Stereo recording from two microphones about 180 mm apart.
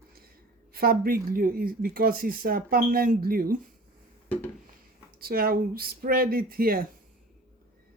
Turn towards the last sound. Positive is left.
turn(degrees=-55)  # may be behind; listen again after turning